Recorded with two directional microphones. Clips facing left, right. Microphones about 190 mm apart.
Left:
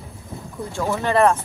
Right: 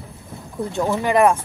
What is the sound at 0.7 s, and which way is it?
Speech, 15° right (ahead or behind).